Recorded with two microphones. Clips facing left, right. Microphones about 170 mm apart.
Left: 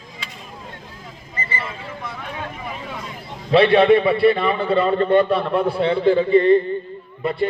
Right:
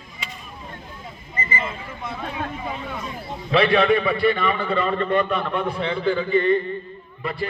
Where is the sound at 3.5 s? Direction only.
30° left (ahead or behind).